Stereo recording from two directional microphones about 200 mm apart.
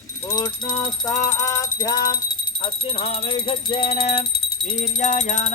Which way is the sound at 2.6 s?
25° left (ahead or behind).